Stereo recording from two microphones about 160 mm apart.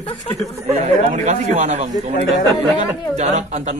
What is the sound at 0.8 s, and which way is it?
Speech, 45° right (ahead or behind).